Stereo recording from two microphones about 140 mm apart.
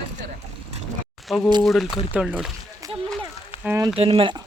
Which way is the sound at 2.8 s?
25° right (ahead or behind).